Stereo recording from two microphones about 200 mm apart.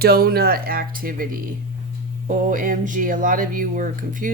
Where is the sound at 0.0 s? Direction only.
50° right (ahead or behind).